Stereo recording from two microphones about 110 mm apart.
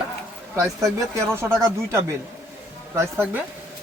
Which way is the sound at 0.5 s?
30° right (ahead or behind).